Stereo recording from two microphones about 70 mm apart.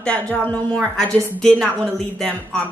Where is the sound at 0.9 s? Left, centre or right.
Centre.